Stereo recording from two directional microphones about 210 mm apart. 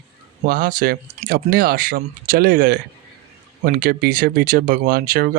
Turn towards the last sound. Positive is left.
turn(degrees=-45)  # may be behind; listen again after turning